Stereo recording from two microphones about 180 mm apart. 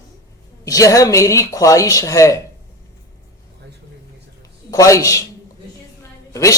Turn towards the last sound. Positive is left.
turn(degrees=15)  # may be behind; listen again after turning